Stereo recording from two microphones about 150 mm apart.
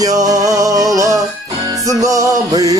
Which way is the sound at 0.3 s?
25° right (ahead or behind).